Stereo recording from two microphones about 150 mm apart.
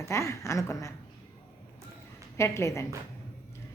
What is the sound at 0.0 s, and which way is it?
Speech, 20° left (ahead or behind).